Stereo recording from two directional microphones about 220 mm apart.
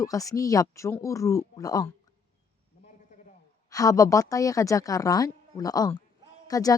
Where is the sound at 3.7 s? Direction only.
15° left (ahead or behind).